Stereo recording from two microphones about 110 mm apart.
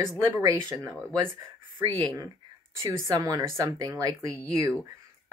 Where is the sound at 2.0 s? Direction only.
45° right (ahead or behind).